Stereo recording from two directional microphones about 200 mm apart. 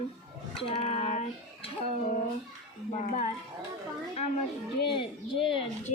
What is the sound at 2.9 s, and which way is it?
Speech, 35° left (ahead or behind).